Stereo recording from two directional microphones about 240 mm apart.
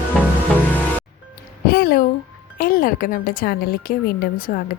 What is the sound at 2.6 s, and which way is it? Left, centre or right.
A woman's voice, left.